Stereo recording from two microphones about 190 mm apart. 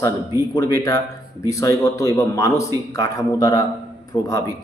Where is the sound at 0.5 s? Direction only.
15° left (ahead or behind).